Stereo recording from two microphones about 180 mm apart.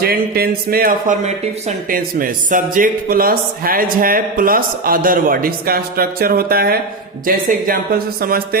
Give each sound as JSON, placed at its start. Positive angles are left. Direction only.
{"t": 0.0, "sound": "speech", "side_deg": -55}